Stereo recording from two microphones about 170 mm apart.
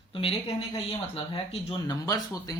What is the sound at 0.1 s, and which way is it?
Speech, 35° left (ahead or behind).